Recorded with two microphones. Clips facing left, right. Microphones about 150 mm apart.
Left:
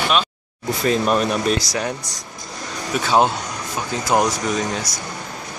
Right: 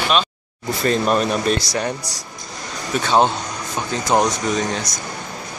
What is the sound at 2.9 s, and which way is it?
Speech, 5° left (ahead or behind).